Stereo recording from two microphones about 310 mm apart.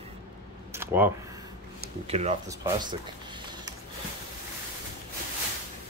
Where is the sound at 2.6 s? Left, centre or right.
Centre.